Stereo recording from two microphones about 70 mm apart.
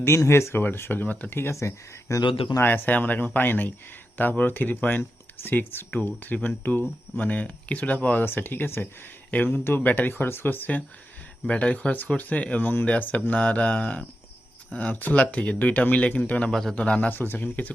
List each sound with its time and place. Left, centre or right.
0.0 s speech: left
2.6 s speech: left
16.5 s speech: centre
16.7 s speech: centre